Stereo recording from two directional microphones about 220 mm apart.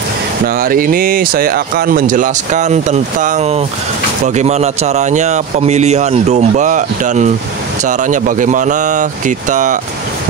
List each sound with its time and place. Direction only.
0.6 s speech: 40° right (ahead or behind)